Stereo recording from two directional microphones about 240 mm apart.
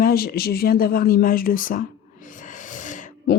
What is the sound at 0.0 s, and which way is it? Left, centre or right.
Speech, left.